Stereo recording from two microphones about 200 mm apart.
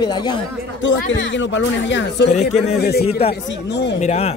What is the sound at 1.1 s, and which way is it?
Speech, 65° left (ahead or behind).